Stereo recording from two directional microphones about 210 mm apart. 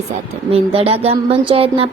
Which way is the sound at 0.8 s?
30° right (ahead or behind).